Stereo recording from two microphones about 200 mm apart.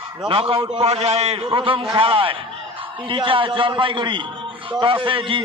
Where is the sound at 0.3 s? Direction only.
25° right (ahead or behind).